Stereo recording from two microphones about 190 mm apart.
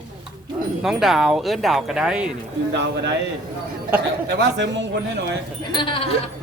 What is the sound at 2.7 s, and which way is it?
Speech, 65° right (ahead or behind).